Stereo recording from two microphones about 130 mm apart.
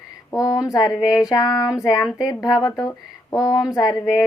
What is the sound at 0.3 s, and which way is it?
Speech, 25° left (ahead or behind).